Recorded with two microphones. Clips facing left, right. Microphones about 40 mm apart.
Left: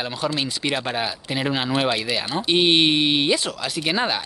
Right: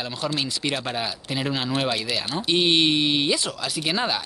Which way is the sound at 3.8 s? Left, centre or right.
Centre.